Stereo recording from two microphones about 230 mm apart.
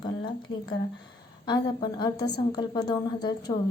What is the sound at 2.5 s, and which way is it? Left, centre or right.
A woman's voice, centre.